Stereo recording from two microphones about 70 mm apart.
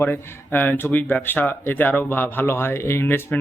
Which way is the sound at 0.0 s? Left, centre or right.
Left.